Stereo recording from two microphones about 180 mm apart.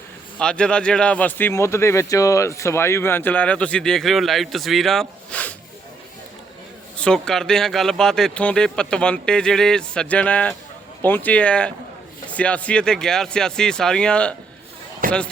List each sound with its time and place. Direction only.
0.3 s speech: 5° left (ahead or behind)
6.9 s a man's voice: 5° left (ahead or behind)
15.0 s speech: 50° right (ahead or behind)